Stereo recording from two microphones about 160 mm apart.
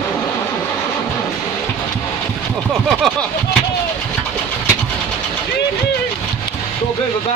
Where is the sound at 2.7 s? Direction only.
Centre (ahead or behind).